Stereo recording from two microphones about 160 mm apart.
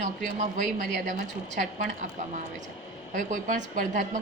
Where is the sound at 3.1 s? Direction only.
55° right (ahead or behind).